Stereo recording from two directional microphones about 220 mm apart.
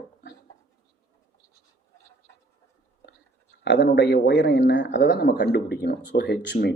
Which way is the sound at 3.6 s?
55° left (ahead or behind).